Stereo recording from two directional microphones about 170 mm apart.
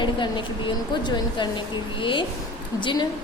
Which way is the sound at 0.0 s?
25° left (ahead or behind).